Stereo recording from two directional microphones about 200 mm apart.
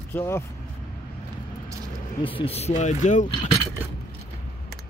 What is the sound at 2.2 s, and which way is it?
Speech, 25° left (ahead or behind).